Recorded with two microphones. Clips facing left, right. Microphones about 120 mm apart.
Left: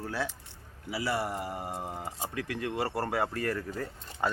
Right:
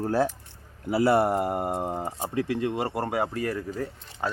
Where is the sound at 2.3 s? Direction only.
25° right (ahead or behind); by 4.3 s centre (ahead or behind).